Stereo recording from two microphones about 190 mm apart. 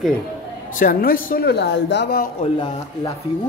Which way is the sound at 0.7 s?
50° left (ahead or behind).